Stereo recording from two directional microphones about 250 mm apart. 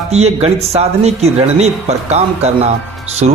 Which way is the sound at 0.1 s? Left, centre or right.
Right.